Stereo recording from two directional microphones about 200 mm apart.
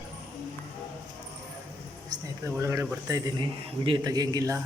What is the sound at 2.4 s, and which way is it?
A man's voice, 15° right (ahead or behind).